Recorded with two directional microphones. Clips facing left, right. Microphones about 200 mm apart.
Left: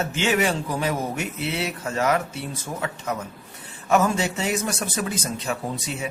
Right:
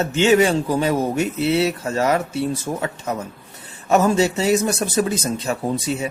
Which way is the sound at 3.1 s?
30° right (ahead or behind).